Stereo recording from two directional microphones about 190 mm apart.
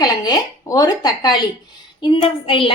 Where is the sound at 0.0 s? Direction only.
20° left (ahead or behind).